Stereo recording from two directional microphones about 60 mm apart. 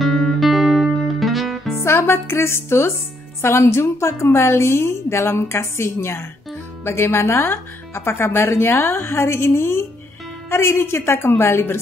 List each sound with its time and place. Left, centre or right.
0.0 s music: centre
1.8 s speech: left